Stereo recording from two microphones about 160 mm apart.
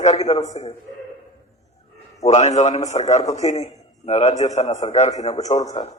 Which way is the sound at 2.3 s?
45° left (ahead or behind).